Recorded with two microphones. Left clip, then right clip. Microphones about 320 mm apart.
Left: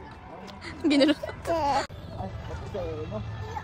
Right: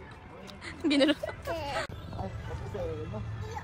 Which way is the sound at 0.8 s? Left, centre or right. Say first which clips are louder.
Left 3 dB; centre.